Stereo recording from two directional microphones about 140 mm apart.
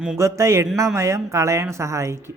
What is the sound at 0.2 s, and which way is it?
Speech, 20° right (ahead or behind).